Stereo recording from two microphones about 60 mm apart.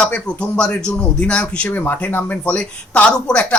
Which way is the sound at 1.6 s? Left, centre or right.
Left.